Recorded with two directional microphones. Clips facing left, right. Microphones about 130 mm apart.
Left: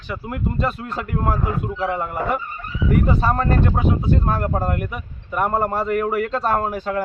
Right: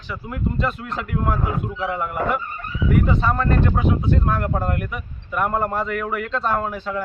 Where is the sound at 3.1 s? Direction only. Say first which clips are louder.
Left 1 dB; 35° left (ahead or behind).